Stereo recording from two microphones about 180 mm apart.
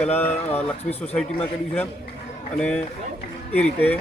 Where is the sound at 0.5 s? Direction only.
35° left (ahead or behind).